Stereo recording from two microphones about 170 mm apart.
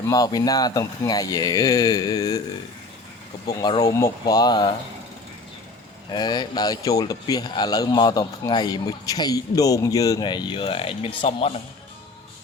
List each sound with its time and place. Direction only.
0.1 s speech: 20° left (ahead or behind)
3.4 s speech: 25° left (ahead or behind)
6.1 s speech: 25° left (ahead or behind)